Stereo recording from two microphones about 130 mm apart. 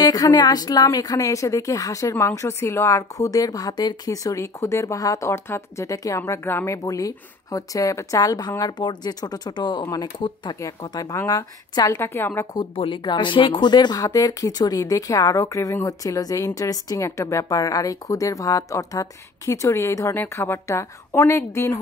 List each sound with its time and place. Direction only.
0.0 s a woman's voice: 30° left (ahead or behind)
12.0 s a woman's voice: 15° left (ahead or behind)
12.5 s a woman's voice: 40° left (ahead or behind); by 21.7 s 20° left (ahead or behind)